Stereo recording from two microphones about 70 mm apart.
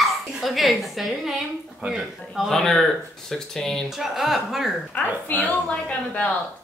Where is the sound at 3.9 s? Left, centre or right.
Centre.